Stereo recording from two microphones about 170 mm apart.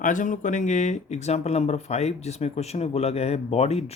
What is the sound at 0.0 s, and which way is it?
Speech, 50° left (ahead or behind).